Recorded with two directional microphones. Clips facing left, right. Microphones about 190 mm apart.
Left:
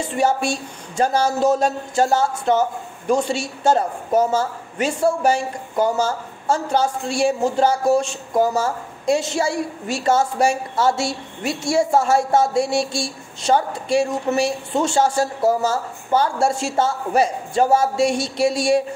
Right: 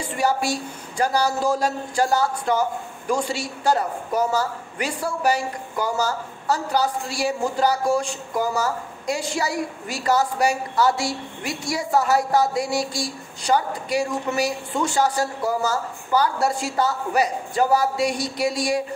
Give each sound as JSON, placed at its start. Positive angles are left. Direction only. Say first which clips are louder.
{"t": 0.0, "sound": "a woman's voice", "louder": "left 3 dB", "side_deg": 25}